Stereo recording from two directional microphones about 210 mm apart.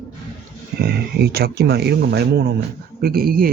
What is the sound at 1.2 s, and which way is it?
Speech, 50° right (ahead or behind).